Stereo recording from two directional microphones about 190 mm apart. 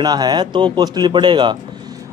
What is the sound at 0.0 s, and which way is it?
Speech, 20° right (ahead or behind).